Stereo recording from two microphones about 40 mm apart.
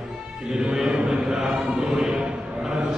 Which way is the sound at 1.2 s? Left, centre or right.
Centre.